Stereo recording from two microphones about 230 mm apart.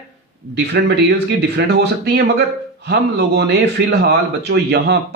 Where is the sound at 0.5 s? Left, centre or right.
Right.